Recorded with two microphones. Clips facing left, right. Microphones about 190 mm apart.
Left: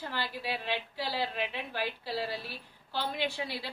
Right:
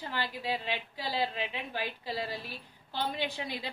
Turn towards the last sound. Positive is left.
turn(degrees=-15)  # may be behind; listen again after turning